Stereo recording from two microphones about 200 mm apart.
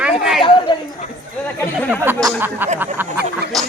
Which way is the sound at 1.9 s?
10° right (ahead or behind).